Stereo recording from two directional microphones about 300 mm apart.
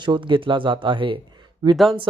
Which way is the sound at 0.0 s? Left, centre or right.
Centre.